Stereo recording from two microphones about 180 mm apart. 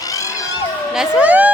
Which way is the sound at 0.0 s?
20° left (ahead or behind).